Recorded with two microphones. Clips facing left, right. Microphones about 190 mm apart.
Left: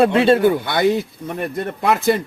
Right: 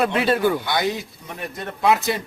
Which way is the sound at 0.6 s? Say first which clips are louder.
Left 6 dB; 55° left (ahead or behind).